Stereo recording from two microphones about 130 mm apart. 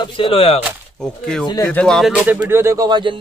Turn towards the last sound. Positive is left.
turn(degrees=-35)  # may be behind; listen again after turning